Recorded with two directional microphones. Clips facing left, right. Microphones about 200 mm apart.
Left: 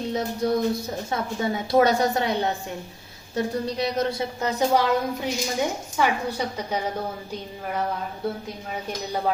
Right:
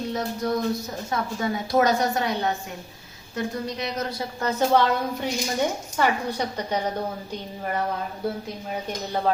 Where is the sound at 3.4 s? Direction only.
30° left (ahead or behind).